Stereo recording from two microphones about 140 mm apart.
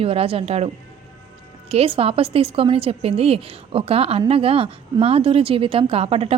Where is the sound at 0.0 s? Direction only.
45° right (ahead or behind).